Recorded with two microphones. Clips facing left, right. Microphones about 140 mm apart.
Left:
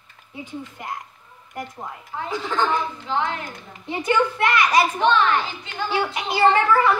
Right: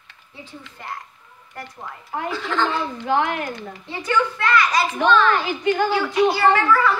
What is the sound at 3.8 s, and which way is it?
A woman's voice, 20° left (ahead or behind).